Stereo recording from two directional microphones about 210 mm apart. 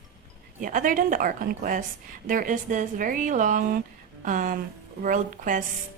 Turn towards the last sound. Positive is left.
turn(degrees=-40)  # may be behind; listen again after turning